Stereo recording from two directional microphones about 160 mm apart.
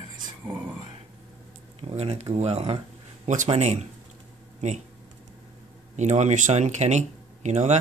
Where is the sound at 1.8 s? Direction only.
40° right (ahead or behind).